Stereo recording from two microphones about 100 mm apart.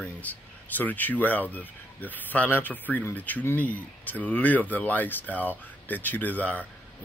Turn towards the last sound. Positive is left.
turn(degrees=15)  # may be behind; listen again after turning